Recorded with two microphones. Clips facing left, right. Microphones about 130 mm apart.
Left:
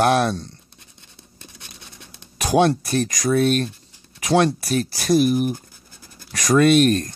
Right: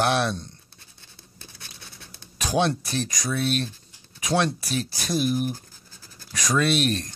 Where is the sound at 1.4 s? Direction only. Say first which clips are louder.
Left 2 dB; 20° left (ahead or behind).